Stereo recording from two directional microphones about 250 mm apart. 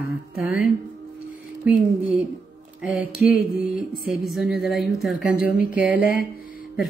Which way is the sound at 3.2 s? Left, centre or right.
Centre.